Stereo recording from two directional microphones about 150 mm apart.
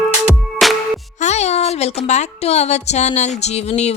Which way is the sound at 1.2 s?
50° left (ahead or behind).